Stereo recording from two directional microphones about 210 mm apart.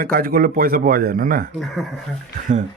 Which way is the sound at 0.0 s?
45° right (ahead or behind).